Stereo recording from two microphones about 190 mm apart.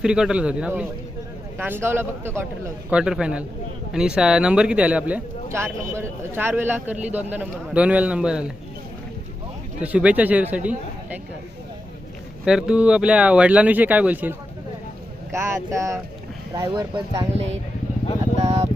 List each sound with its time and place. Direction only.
0.0 s a man's voice: 5° right (ahead or behind)
9.8 s speech: 5° right (ahead or behind)
12.5 s speech: 5° right (ahead or behind); by 17.2 s 25° right (ahead or behind)
17.3 s speech: 35° right (ahead or behind)